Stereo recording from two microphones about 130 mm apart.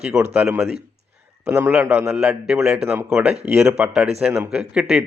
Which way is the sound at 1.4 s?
15° right (ahead or behind).